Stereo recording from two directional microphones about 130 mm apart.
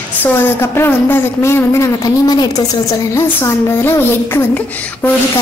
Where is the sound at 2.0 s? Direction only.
30° left (ahead or behind).